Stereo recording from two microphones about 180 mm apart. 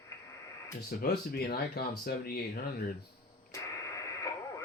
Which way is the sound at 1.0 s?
60° left (ahead or behind).